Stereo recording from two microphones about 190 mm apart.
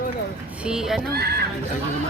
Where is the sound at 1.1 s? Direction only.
55° right (ahead or behind).